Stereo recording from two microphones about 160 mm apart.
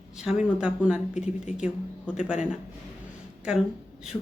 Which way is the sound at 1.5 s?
50° left (ahead or behind).